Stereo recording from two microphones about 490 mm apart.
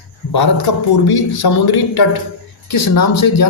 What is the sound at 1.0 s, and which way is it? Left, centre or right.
Speech, left.